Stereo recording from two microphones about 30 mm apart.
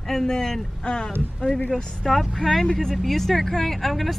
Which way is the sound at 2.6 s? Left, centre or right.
Left.